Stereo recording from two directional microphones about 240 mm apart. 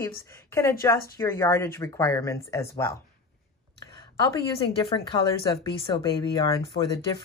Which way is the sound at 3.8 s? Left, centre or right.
Centre.